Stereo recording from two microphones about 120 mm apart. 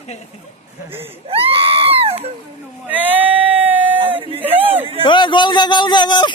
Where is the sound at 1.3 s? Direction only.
55° right (ahead or behind).